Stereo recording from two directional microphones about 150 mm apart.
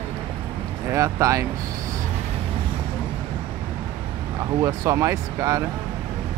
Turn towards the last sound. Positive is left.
turn(degrees=-20)  # may be behind; listen again after turning